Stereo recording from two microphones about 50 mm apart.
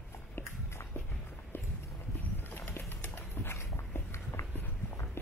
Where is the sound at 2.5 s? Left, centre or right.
Left.